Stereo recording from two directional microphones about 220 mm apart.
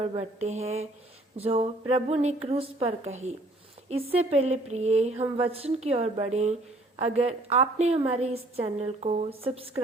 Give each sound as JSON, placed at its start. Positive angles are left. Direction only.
{"t": 0.0, "sound": "a woman's voice", "side_deg": -25}